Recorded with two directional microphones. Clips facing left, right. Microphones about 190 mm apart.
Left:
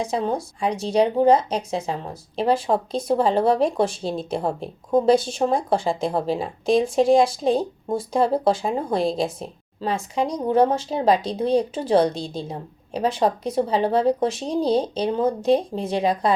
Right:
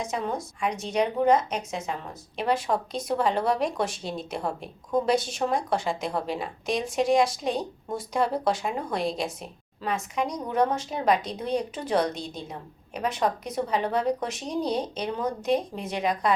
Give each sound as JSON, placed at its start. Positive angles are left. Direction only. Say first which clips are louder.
{"t": 0.0, "sound": "speech", "louder": "left 6 dB", "side_deg": 30}